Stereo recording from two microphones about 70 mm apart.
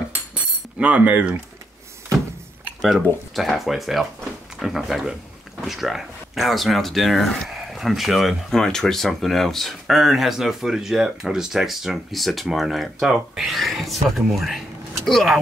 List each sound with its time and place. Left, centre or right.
0.7 s speech: right
2.8 s speech: centre